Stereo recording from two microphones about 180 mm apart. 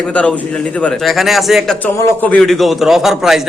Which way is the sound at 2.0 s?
15° left (ahead or behind).